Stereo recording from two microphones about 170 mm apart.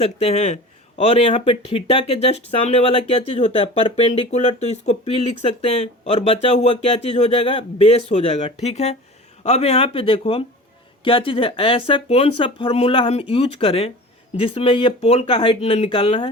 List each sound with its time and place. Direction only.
0.0 s speech: 40° left (ahead or behind)